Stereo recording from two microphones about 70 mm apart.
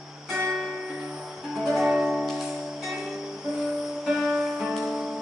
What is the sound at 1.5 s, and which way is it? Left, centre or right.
Music, centre.